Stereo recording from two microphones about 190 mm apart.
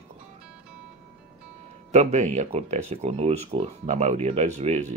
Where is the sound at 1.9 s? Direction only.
35° right (ahead or behind).